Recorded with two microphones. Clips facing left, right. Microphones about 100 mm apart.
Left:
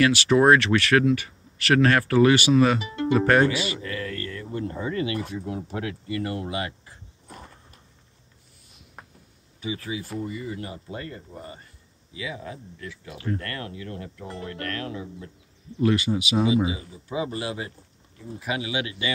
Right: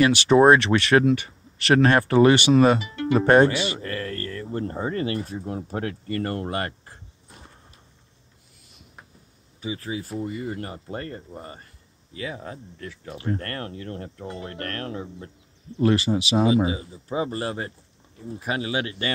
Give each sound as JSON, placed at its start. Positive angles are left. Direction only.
{"t": 0.0, "sound": "speech", "side_deg": -25}
{"t": 3.8, "sound": "speech", "side_deg": -45}
{"t": 9.6, "sound": "speech", "side_deg": -35}